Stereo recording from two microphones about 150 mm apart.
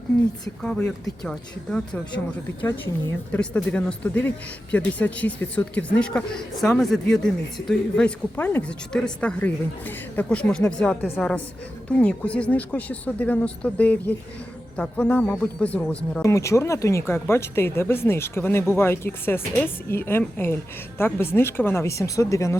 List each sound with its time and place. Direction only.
0.6 s speech: 5° left (ahead or behind)
16.2 s speech: 20° left (ahead or behind)